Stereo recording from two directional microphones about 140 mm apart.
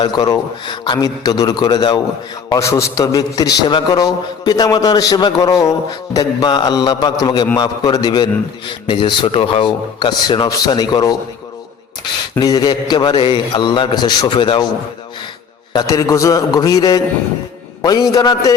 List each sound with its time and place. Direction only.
0.0 s a man's voice: 30° left (ahead or behind)
12.4 s a man's voice: 30° left (ahead or behind)
15.7 s a man's voice: 25° left (ahead or behind)